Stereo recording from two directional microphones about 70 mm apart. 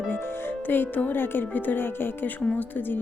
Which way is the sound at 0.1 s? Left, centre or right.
Left.